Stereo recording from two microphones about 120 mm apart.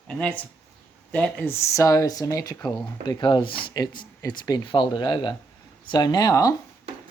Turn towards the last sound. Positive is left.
turn(degrees=30)  # may be behind; listen again after turning